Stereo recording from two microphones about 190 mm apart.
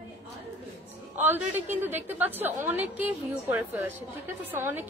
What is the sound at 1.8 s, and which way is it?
A woman's voice, 10° right (ahead or behind).